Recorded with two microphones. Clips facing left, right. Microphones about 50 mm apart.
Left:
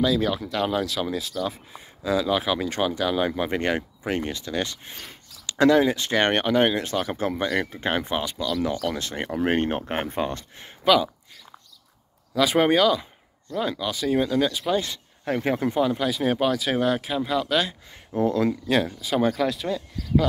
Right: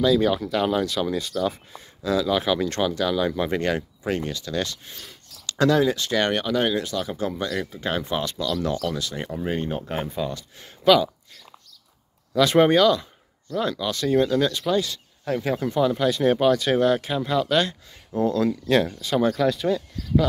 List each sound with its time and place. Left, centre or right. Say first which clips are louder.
0.0 s speech: right 3 dB; centre
1.8 s speech: even; centre
8.2 s speech: even; centre
8.9 s speech: left 1 dB; left
9.4 s speech: left 5 dB; left
12.4 s speech: right 2 dB; centre
14.8 s speech: right 4 dB; left
15.8 s speech: right 6 dB; centre
17.9 s speech: even; left
18.7 s speech: right 2 dB; centre